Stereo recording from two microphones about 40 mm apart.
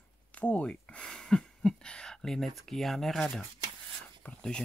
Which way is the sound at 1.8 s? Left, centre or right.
Left.